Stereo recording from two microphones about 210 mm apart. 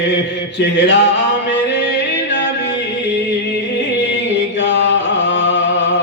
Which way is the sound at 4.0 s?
55° left (ahead or behind).